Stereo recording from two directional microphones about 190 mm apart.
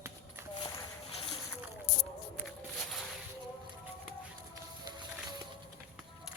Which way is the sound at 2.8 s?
Centre (ahead or behind).